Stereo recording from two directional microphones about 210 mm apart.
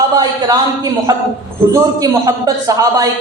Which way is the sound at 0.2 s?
20° right (ahead or behind).